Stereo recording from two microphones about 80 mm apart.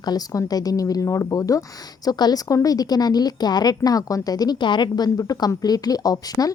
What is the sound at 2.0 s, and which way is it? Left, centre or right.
A woman's voice, left.